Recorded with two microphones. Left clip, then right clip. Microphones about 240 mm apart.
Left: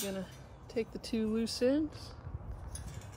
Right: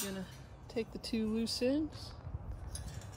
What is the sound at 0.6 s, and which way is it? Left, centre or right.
Speech, left.